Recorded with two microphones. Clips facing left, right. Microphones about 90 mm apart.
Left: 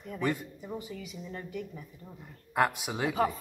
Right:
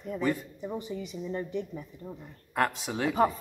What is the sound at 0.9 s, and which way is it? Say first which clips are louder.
Speech: right 6 dB; 25° right (ahead or behind).